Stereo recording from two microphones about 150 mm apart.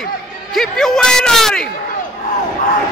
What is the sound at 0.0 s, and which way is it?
Speech, centre (ahead or behind).